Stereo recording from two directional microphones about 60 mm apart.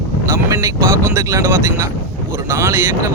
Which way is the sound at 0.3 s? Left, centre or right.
Right.